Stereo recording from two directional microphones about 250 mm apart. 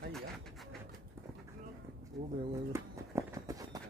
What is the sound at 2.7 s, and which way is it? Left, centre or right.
Horse, centre.